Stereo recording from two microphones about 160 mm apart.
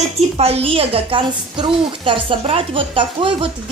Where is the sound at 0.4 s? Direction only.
40° right (ahead or behind).